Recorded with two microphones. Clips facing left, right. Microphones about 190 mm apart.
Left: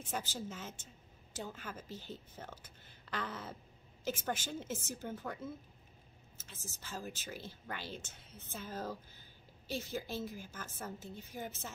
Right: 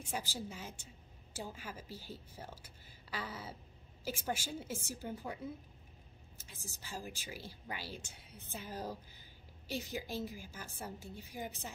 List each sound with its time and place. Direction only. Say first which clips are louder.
0.1 s a woman's voice: left 1 dB; 10° right (ahead or behind)